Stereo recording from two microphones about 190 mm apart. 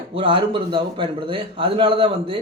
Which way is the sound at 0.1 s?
25° right (ahead or behind).